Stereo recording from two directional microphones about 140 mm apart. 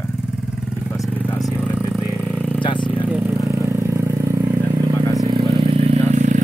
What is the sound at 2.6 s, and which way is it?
Vehicle, 35° left (ahead or behind).